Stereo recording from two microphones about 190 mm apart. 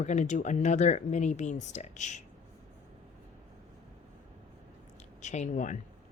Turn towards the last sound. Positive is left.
turn(degrees=40)  # may be behind; listen again after turning